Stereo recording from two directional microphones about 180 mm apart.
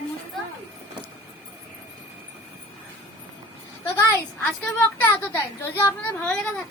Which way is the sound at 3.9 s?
15° left (ahead or behind).